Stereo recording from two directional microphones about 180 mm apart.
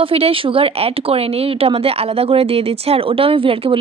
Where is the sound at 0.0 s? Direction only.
30° right (ahead or behind).